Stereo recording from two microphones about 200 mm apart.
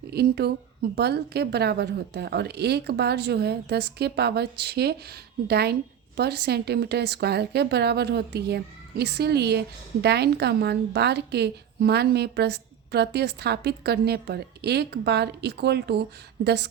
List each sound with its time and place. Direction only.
0.1 s a woman's voice: 55° right (ahead or behind)